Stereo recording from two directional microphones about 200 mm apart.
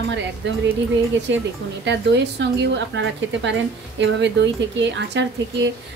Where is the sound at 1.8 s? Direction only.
60° right (ahead or behind).